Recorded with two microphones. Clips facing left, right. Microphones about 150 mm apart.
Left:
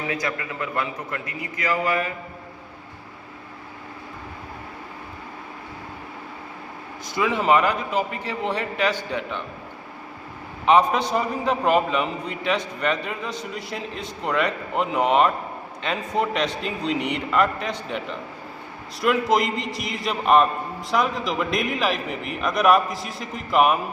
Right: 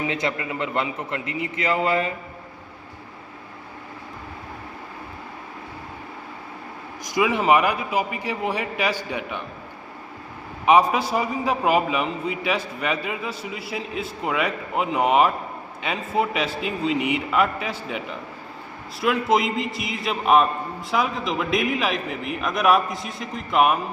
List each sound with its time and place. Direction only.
0.1 s a man's voice: 25° right (ahead or behind)
7.0 s a man's voice: 10° right (ahead or behind)
10.7 s a man's voice: 10° right (ahead or behind)